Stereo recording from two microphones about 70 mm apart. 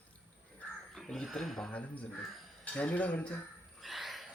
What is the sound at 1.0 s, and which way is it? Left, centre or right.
Speech, centre.